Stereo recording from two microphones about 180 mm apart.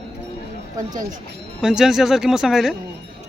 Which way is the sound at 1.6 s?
5° right (ahead or behind).